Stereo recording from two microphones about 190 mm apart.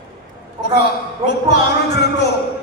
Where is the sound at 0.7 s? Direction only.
60° left (ahead or behind).